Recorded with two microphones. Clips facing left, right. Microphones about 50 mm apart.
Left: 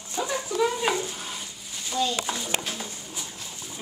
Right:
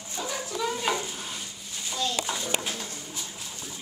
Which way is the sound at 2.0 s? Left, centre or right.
Centre.